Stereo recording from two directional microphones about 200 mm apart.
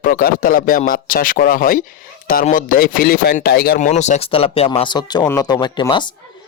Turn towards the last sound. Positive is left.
turn(degrees=20)  # may be behind; listen again after turning